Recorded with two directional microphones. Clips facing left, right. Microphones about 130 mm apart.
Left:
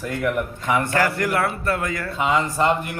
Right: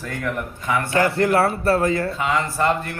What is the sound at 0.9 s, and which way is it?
A man's voice, 25° right (ahead or behind).